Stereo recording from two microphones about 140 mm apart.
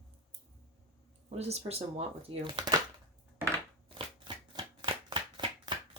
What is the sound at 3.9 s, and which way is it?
Shuffling cards, 35° right (ahead or behind).